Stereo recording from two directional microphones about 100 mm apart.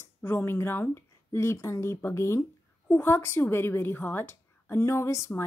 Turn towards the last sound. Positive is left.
turn(degrees=30)  # may be behind; listen again after turning